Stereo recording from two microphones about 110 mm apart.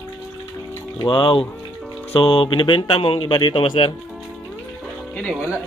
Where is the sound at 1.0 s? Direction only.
45° left (ahead or behind).